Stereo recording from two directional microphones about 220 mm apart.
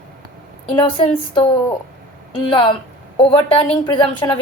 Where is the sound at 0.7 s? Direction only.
20° left (ahead or behind).